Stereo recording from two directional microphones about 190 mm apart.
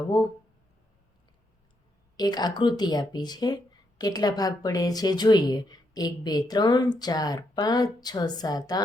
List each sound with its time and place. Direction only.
2.1 s speech: 20° left (ahead or behind)